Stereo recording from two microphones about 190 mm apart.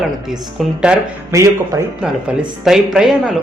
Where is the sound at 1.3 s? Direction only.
15° right (ahead or behind).